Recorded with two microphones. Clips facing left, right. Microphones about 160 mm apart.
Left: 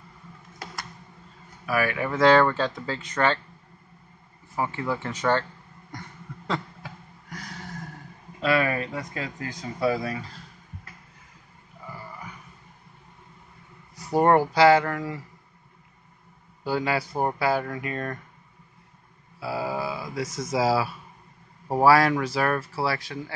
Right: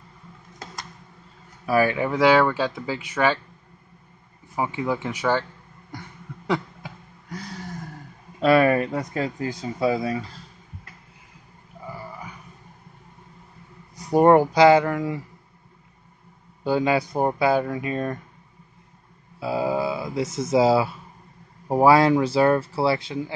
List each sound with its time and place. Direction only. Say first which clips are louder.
1.7 s speech: right 5 dB; 25° right (ahead or behind)
2.1 s speech: even; 5° right (ahead or behind)
4.6 s speech: right 3 dB; 15° right (ahead or behind)
5.9 s a sound: right 2 dB; 10° right (ahead or behind)
8.4 s speech: right 7 dB; 45° right (ahead or behind); by 10.1 s 25° right (ahead or behind)
13.9 s speech: right 4 dB; 15° right (ahead or behind)
16.6 s speech: right 5 dB; 20° right (ahead or behind)
19.4 s speech: right 5 dB; 20° right (ahead or behind)